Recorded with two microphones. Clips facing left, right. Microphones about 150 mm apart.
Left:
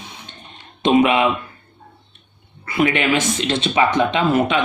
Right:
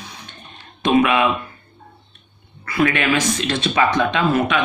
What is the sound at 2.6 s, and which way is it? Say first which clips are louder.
Speech: even; 20° left (ahead or behind).